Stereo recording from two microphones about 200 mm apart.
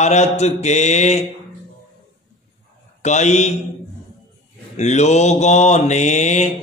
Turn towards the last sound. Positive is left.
turn(degrees=35)  # may be behind; listen again after turning